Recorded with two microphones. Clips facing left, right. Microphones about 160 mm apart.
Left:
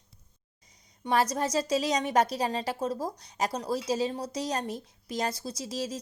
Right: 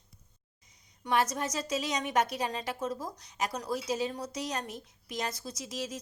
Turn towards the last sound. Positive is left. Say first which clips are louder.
# left 4 dB
turn(degrees=35)  # may be behind; listen again after turning